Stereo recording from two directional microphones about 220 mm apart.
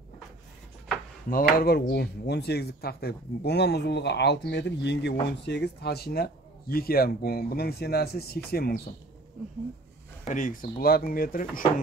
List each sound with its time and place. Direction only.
1.3 s speech: 45° left (ahead or behind)
10.2 s speech: 35° left (ahead or behind)